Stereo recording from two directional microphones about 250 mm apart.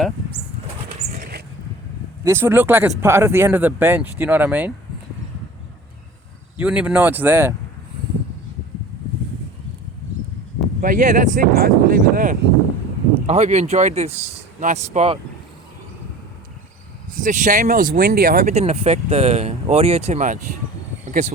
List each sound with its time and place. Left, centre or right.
1.1 s a sound: right
2.2 s speech: centre
6.6 s speech: centre
10.8 s speech: right
17.1 s speech: right